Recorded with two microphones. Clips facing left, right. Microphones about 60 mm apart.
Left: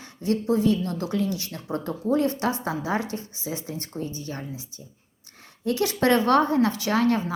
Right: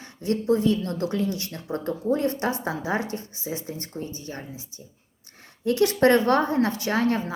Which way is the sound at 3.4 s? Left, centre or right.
Right.